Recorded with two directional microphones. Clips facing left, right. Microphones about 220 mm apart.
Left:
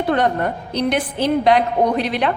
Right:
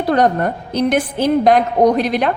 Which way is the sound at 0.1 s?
40° right (ahead or behind).